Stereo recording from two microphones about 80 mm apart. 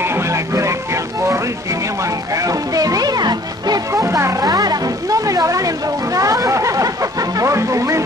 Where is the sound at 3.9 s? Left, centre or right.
Right.